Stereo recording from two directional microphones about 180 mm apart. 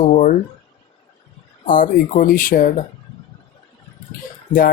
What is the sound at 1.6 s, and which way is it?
Speech, 45° left (ahead or behind).